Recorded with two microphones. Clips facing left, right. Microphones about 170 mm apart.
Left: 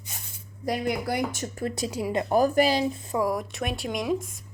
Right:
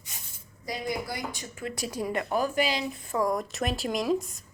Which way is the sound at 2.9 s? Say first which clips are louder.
Left 2 dB; 20° left (ahead or behind).